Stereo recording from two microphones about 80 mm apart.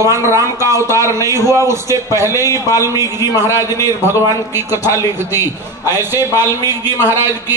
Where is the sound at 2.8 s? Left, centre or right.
Right.